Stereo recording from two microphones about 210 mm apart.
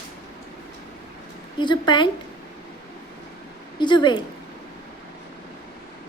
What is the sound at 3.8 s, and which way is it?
Speech, 20° left (ahead or behind).